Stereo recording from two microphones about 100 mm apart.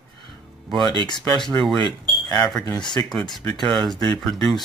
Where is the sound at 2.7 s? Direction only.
50° left (ahead or behind).